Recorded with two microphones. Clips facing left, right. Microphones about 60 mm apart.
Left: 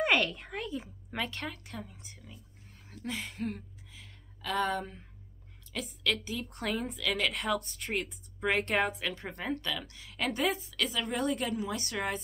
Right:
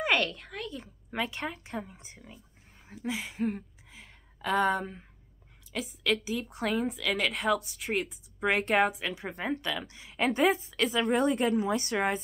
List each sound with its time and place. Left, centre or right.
0.0 s a woman's voice: centre
1.1 s a woman's voice: centre
1.4 s a woman's voice: right
2.9 s a woman's voice: centre
3.9 s a sound: right
4.6 s a woman's voice: centre